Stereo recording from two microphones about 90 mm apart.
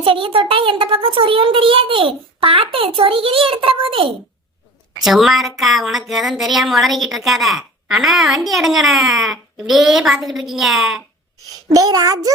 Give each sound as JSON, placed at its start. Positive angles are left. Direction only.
{"t": 0.0, "sound": "a child's voice", "side_deg": -85}
{"t": 4.9, "sound": "a woman's voice", "side_deg": 0}
{"t": 11.7, "sound": "a child's voice", "side_deg": -45}